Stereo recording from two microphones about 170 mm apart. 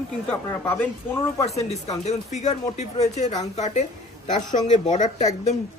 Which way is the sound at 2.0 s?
40° left (ahead or behind).